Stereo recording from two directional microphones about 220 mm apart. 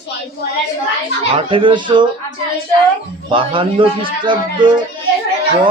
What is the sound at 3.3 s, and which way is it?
A man's voice, 25° right (ahead or behind).